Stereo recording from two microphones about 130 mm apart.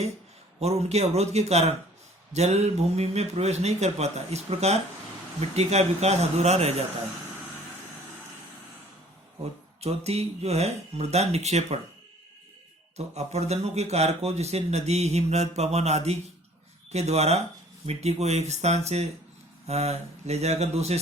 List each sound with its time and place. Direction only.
0.6 s a man's voice: 55° right (ahead or behind)
9.8 s a man's voice: 55° right (ahead or behind)
13.1 s a man's voice: 55° right (ahead or behind)